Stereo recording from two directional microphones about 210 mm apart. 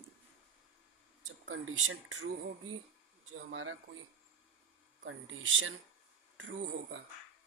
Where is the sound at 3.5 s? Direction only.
65° right (ahead or behind).